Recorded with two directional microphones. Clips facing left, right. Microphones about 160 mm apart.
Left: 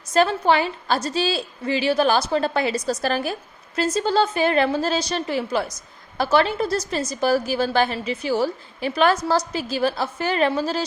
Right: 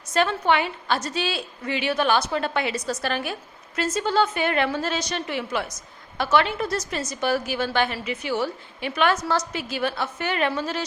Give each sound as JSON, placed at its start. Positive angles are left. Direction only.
{"t": 0.1, "sound": "a woman's voice", "side_deg": 35}